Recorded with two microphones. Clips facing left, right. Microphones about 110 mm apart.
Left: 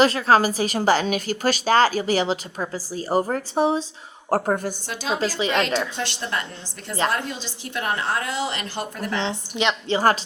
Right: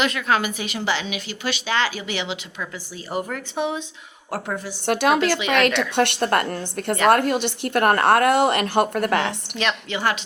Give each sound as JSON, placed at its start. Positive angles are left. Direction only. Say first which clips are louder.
{"t": 0.0, "sound": "a woman's voice", "louder": "left 5 dB", "side_deg": 35}
{"t": 4.9, "sound": "speech", "louder": "right 9 dB", "side_deg": -65}
{"t": 5.4, "sound": "a woman's voice", "louder": "right 1 dB", "side_deg": 35}
{"t": 6.0, "sound": "speech", "louder": "right 8 dB", "side_deg": -60}
{"t": 9.2, "sound": "a woman's voice", "louder": "left 1 dB", "side_deg": 20}
{"t": 9.9, "sound": "a woman's voice", "louder": "left 7 dB", "side_deg": 40}